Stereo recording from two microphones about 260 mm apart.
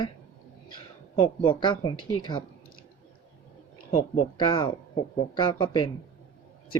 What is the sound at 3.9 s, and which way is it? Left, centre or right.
Speech, left.